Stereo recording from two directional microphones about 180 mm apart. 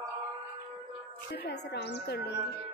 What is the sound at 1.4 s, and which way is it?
Music, 70° left (ahead or behind).